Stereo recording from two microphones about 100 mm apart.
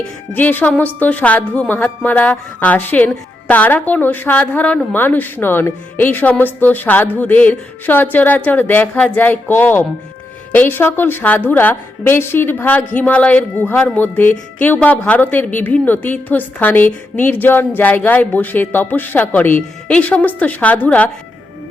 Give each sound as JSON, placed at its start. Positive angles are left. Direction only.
{"t": 0.3, "sound": "a woman's voice", "side_deg": 15}